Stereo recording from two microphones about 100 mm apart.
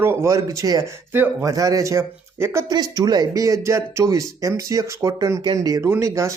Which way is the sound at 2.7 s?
40° right (ahead or behind).